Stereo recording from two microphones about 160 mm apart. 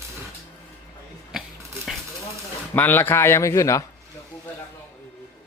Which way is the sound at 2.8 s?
10° left (ahead or behind).